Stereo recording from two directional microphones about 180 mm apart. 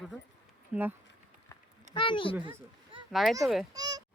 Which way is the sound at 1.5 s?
25° left (ahead or behind).